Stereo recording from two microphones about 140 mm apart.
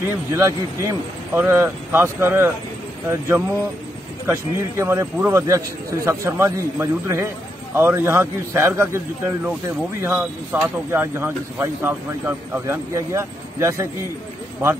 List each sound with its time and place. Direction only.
0.3 s a man's voice: 20° right (ahead or behind)